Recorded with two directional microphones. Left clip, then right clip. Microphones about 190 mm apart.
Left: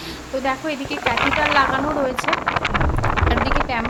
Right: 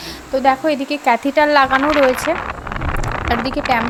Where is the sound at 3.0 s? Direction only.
25° right (ahead or behind).